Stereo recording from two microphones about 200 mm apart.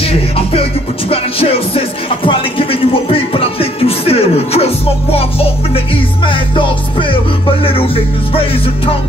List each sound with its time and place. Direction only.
0.0 s music: 30° left (ahead or behind)